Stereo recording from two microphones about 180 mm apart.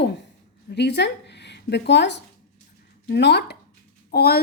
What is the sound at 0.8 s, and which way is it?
A woman's voice, 70° left (ahead or behind).